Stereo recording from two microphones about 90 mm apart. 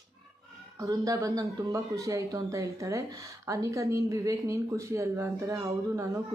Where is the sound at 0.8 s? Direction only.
35° right (ahead or behind).